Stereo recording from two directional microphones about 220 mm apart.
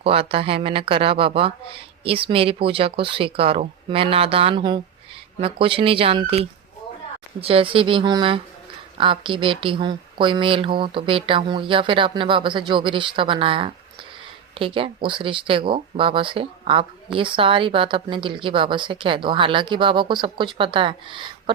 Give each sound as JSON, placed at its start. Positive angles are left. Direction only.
{"t": 0.0, "sound": "speech", "side_deg": -25}